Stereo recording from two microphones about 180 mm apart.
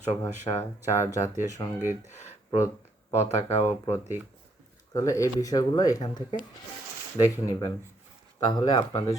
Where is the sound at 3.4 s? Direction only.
35° left (ahead or behind).